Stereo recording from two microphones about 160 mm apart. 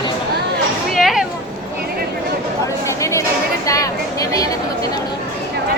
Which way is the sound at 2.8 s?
20° left (ahead or behind).